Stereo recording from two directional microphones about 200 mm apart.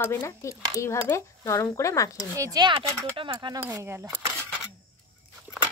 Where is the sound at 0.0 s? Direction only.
10° left (ahead or behind).